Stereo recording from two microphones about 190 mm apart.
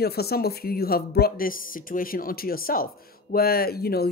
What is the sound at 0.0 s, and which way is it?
Speech, 55° left (ahead or behind).